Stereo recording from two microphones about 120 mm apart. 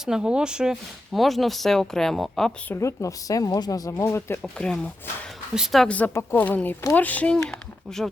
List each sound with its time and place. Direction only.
0.0 s speech: 5° right (ahead or behind)
2.6 s speech: 25° left (ahead or behind)
4.4 s a woman's voice: 5° left (ahead or behind)